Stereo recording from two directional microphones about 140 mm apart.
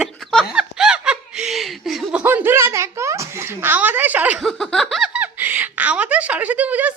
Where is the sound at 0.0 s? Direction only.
Centre (ahead or behind).